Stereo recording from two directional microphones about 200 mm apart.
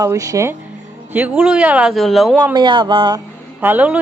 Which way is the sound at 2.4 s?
20° right (ahead or behind).